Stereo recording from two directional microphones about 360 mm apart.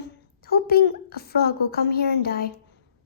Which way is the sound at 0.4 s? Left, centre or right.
Left.